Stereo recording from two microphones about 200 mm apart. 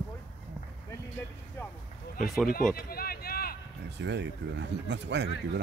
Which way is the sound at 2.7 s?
50° left (ahead or behind).